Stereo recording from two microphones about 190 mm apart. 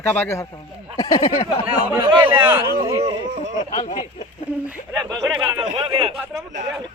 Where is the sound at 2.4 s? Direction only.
10° right (ahead or behind).